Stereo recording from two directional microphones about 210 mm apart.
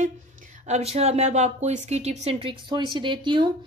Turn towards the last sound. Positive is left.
turn(degrees=-20)  # may be behind; listen again after turning